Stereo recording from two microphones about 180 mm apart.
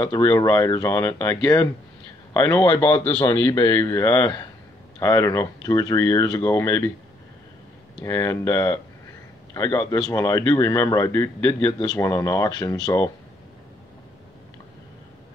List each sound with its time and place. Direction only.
0.1 s speech: 20° left (ahead or behind)
8.0 s speech: 20° left (ahead or behind)